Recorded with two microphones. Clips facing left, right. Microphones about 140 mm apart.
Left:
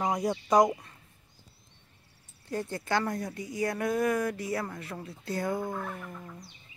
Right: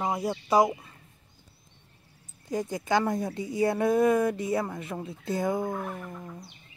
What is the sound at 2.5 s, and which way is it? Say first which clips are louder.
A woman's voice: right 4 dB; 15° right (ahead or behind).